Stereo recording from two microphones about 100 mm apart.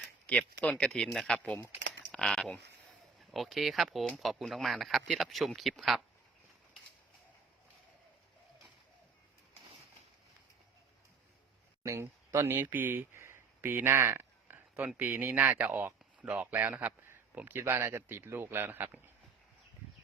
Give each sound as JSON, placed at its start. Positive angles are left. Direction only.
{"t": 0.3, "sound": "speech", "side_deg": 10}
{"t": 1.9, "sound": "typing", "side_deg": 5}
{"t": 3.3, "sound": "speech", "side_deg": 0}
{"t": 11.8, "sound": "a sound", "side_deg": -30}
{"t": 14.9, "sound": "a man's voice", "side_deg": -20}